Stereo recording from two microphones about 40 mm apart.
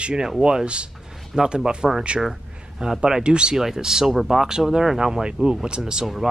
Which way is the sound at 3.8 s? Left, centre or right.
Centre.